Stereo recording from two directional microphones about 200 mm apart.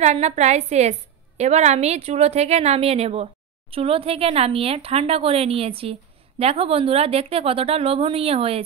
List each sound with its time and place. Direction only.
0.0 s speech: 35° right (ahead or behind)